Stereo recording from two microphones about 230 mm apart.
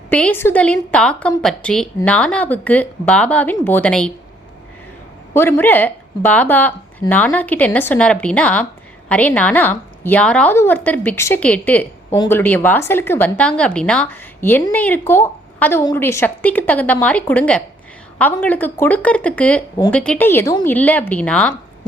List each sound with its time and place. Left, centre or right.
0.1 s speech: centre
5.3 s speech: centre